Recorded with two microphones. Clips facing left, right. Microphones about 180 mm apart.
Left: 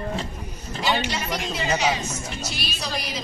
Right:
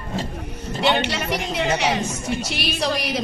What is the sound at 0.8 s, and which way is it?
A woman's voice, 65° right (ahead or behind).